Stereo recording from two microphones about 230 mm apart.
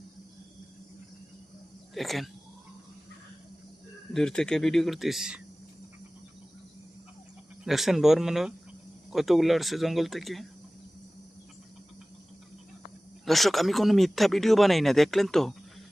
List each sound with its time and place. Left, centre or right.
2.0 s speech: centre
4.1 s speech: centre
7.6 s speech: centre
13.2 s speech: centre